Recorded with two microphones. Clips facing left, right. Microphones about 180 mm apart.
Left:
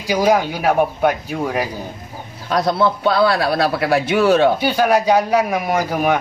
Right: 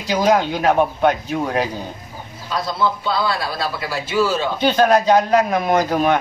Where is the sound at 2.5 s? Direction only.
65° left (ahead or behind).